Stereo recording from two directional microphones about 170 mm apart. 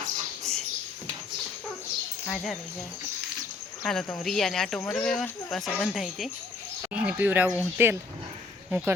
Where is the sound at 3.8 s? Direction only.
5° left (ahead or behind).